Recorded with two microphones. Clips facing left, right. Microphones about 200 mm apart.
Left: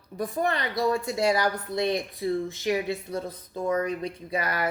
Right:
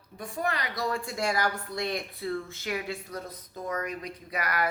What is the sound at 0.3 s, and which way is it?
Speech, 30° left (ahead or behind).